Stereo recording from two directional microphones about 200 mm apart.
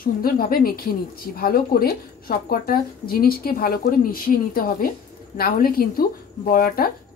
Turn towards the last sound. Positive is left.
turn(degrees=45)  # may be behind; listen again after turning